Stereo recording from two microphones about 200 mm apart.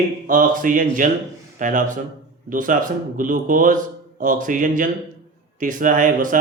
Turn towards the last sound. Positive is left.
turn(degrees=-40)  # may be behind; listen again after turning